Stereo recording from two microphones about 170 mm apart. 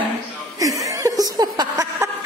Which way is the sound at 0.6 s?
20° right (ahead or behind).